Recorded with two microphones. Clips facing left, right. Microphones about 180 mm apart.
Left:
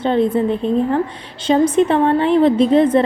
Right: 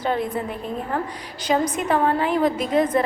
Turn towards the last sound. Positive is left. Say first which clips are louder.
# left 8 dB
turn(degrees=25)  # may be behind; listen again after turning